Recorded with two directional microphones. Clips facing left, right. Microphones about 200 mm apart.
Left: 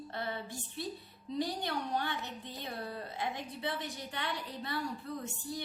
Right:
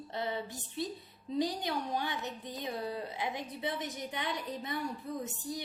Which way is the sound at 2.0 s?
15° right (ahead or behind).